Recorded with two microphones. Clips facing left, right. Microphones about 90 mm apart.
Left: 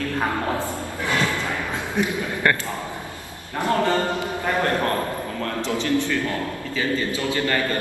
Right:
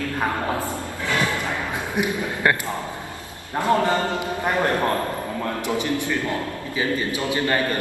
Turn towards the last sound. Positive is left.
turn(degrees=-20)  # may be behind; listen again after turning